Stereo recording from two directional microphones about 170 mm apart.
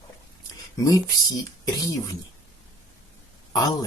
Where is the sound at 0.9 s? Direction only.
20° left (ahead or behind).